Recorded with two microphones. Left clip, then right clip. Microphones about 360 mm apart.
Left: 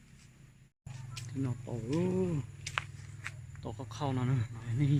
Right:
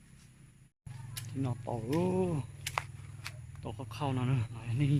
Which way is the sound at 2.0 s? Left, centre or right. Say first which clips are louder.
Right 1 dB; centre.